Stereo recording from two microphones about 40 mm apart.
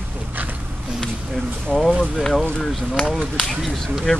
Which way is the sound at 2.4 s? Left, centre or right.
Left.